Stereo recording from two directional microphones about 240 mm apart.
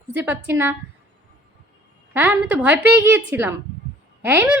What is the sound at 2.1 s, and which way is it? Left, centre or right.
A woman's voice, centre.